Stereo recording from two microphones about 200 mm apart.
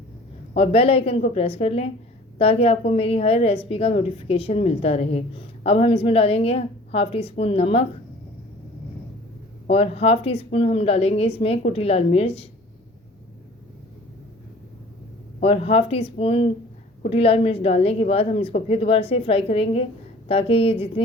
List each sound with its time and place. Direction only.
0.5 s a woman's voice: 30° left (ahead or behind)
9.6 s a woman's voice: 30° left (ahead or behind)
15.4 s a woman's voice: 30° left (ahead or behind)